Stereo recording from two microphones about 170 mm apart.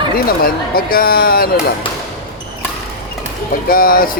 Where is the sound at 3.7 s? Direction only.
60° left (ahead or behind).